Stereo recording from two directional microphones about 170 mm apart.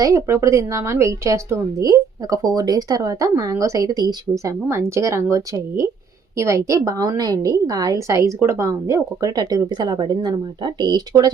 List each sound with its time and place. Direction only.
0.0 s a woman's voice: 20° right (ahead or behind)